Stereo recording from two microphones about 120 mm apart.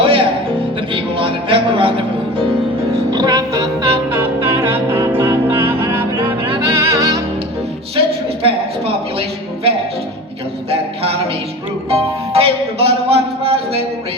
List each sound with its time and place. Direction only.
0.0 s music: 45° right (ahead or behind)
3.1 s music: 35° right (ahead or behind)
4.1 s music: 20° right (ahead or behind)
6.1 s music: 45° right (ahead or behind)
6.7 s music: 25° right (ahead or behind)
7.9 s music: 50° right (ahead or behind)
11.9 s music: 55° right (ahead or behind)